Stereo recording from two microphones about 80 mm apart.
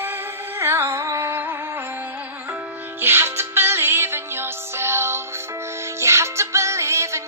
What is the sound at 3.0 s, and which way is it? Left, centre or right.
Music, right.